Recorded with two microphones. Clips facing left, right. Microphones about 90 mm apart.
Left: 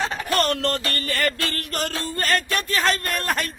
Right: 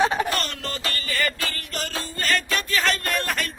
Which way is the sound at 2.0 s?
45° left (ahead or behind).